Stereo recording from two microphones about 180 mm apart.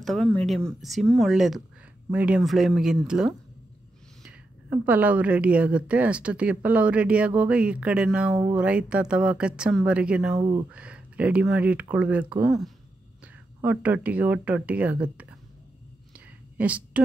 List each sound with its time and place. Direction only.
0.0 s a woman's voice: 5° left (ahead or behind)
10.4 s speech: 20° right (ahead or behind)
10.7 s a woman's voice: 5° right (ahead or behind)
13.6 s a woman's voice: 10° right (ahead or behind)
16.5 s speech: 5° right (ahead or behind)